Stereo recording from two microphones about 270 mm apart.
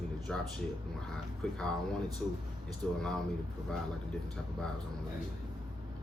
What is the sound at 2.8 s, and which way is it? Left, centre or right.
Speech, centre.